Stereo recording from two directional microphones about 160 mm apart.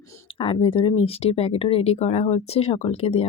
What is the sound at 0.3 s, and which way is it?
Speech, 30° left (ahead or behind).